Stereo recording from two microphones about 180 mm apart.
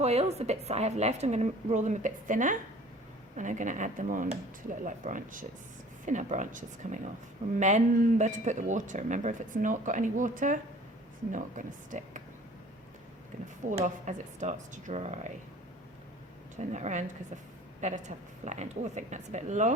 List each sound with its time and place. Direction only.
0.0 s a woman's voice: 35° right (ahead or behind)
8.2 s speech: 40° right (ahead or behind)
13.7 s a woman's voice: 45° right (ahead or behind)
16.6 s a woman's voice: 40° right (ahead or behind)